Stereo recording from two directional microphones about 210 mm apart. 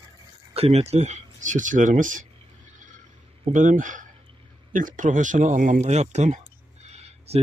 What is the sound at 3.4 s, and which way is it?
Speech, 35° right (ahead or behind).